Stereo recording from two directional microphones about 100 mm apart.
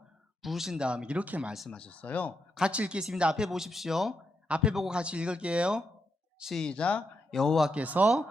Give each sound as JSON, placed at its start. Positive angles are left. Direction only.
{"t": 0.4, "sound": "speech", "side_deg": -5}
{"t": 1.5, "sound": "speech", "side_deg": 0}
{"t": 1.8, "sound": "speech", "side_deg": 15}
{"t": 2.6, "sound": "speech", "side_deg": -10}
{"t": 6.4, "sound": "speech", "side_deg": 5}
{"t": 7.7, "sound": "speech", "side_deg": -15}